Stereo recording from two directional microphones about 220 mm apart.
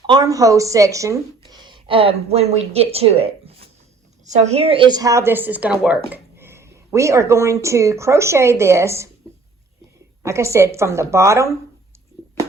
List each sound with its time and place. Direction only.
0.1 s speech: 15° right (ahead or behind)
10.2 s speech: 15° right (ahead or behind)